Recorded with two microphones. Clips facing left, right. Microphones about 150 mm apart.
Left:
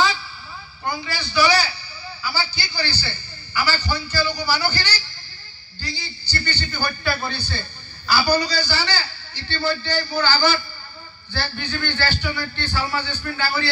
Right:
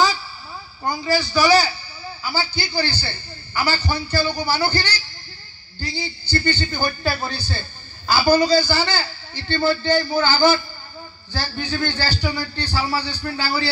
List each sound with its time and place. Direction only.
0.8 s a man's voice: 40° right (ahead or behind)